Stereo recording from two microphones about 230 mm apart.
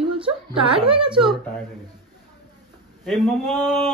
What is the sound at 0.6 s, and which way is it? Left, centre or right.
Speech, right.